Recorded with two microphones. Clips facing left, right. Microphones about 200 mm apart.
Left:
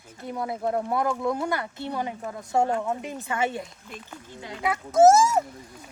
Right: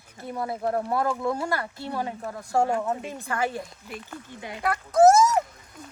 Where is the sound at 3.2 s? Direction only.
25° left (ahead or behind).